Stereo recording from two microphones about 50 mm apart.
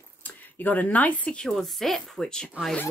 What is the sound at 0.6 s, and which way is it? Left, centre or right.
Speech, left.